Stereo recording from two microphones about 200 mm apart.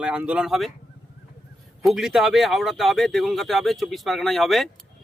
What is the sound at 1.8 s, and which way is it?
Speech, centre (ahead or behind).